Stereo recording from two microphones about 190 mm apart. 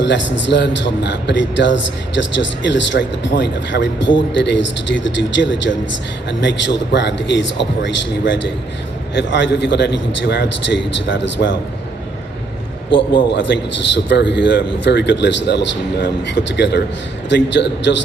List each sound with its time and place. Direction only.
0.0 s a man's voice: 70° left (ahead or behind)
12.9 s a man's voice: 25° left (ahead or behind)
13.3 s a man's voice: 70° left (ahead or behind)